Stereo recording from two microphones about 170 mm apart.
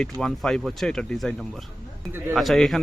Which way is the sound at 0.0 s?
Centre (ahead or behind).